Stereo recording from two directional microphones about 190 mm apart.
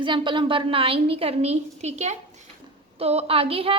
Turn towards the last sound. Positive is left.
turn(degrees=-30)  # may be behind; listen again after turning